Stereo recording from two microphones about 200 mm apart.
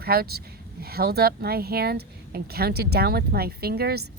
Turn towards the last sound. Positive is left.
turn(degrees=-50)  # may be behind; listen again after turning